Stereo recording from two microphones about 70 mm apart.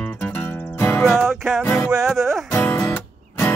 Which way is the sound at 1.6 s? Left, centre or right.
Left.